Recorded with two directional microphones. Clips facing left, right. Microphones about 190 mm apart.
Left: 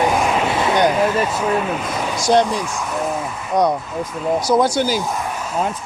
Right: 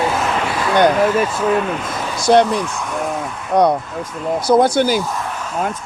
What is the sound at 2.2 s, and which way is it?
Speech, 60° right (ahead or behind).